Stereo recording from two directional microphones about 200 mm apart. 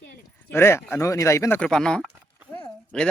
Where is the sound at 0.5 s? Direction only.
10° left (ahead or behind).